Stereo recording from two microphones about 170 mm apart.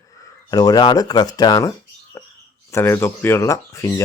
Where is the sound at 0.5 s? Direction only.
25° left (ahead or behind).